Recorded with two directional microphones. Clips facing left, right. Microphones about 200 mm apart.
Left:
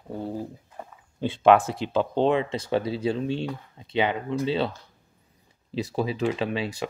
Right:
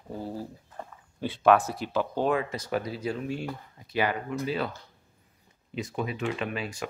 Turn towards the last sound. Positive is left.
turn(degrees=30)  # may be behind; listen again after turning